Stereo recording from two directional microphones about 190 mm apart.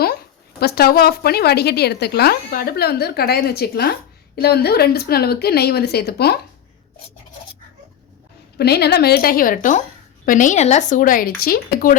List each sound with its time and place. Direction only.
0.6 s a woman's voice: 55° left (ahead or behind)
8.5 s speech: 55° left (ahead or behind)